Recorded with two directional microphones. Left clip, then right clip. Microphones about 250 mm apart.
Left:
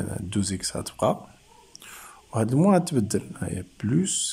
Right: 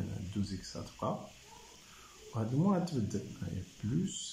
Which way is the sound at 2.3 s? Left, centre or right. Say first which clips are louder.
Left 13 dB; left.